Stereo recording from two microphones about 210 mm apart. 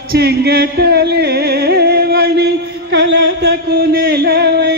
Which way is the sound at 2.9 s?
55° right (ahead or behind).